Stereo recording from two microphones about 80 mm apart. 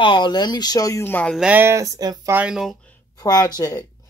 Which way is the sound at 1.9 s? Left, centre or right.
Right.